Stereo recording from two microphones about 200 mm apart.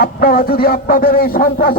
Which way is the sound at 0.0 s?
45° left (ahead or behind).